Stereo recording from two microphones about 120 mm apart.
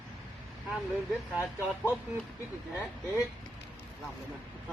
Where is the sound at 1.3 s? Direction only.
15° right (ahead or behind).